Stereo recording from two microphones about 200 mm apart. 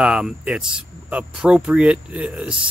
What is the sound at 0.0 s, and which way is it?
Speech, 5° right (ahead or behind).